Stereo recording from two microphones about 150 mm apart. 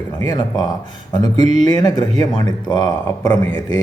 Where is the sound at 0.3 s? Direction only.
25° left (ahead or behind).